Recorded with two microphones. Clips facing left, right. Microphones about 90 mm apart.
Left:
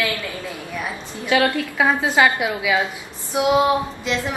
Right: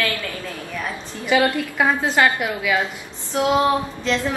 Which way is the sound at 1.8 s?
5° left (ahead or behind).